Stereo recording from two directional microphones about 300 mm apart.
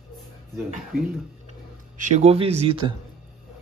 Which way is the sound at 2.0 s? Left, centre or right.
Right.